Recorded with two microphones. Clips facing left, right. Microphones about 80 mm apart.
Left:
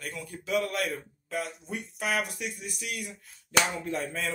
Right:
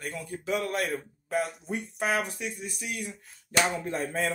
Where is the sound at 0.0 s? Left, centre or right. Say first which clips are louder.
Right 3 dB; right.